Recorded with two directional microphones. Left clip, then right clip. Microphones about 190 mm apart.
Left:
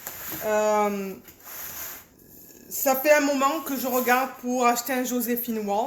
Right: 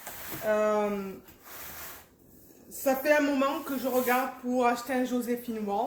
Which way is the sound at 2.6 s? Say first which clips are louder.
Left 5 dB; 60° left (ahead or behind).